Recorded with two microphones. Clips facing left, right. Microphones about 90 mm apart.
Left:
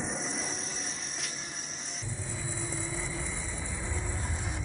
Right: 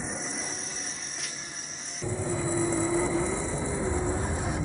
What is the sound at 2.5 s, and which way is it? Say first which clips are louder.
Vehicle: right 13 dB; 35° right (ahead or behind).